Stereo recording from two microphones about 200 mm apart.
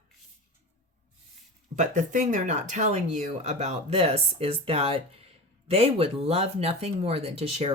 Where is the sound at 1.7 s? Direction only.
35° right (ahead or behind).